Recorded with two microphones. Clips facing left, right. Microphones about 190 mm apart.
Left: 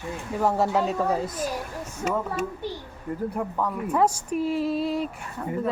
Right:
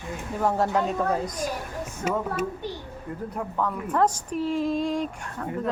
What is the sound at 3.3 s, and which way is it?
Speech, 5° left (ahead or behind).